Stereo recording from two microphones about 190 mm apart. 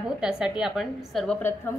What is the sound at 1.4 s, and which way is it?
Speech, 10° left (ahead or behind).